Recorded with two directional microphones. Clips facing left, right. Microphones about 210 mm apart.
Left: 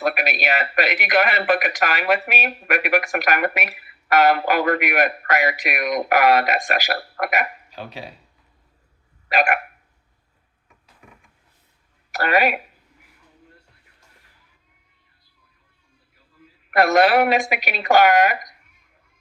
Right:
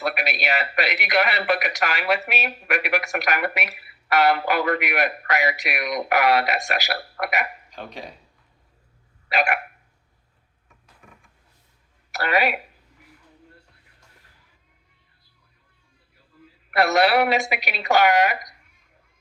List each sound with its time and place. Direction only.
0.0 s a man's voice: 50° left (ahead or behind)
7.7 s speech: 5° left (ahead or behind)
9.3 s a man's voice: 50° left (ahead or behind)
12.1 s speech: 50° left (ahead or behind)
16.7 s a man's voice: 50° left (ahead or behind)